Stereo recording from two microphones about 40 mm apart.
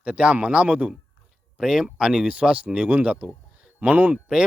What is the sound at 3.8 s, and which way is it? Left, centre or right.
Speech, right.